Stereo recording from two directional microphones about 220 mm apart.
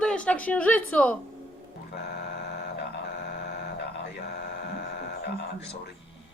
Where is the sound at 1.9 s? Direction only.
50° left (ahead or behind).